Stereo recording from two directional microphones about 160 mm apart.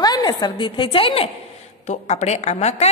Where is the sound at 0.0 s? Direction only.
25° left (ahead or behind).